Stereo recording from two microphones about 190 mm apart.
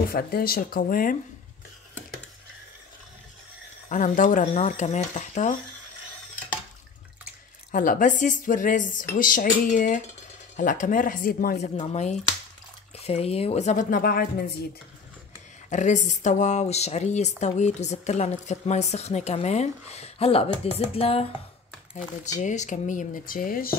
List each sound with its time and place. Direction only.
0.1 s speech: 50° left (ahead or behind)
3.9 s a woman's voice: 40° left (ahead or behind)
7.7 s speech: 45° left (ahead or behind)
11.5 s a woman's voice: 35° left (ahead or behind); by 14.2 s 50° left (ahead or behind)
15.7 s a woman's voice: 40° left (ahead or behind)